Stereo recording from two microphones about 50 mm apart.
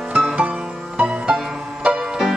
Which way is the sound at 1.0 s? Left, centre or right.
Centre.